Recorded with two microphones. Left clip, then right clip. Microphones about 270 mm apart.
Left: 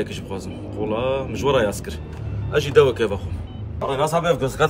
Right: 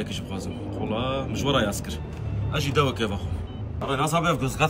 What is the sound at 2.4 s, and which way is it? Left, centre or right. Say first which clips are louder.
Speech: left 9 dB; centre.